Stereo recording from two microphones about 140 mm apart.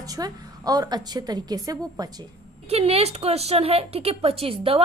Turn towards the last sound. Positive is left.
turn(degrees=-40)  # may be behind; listen again after turning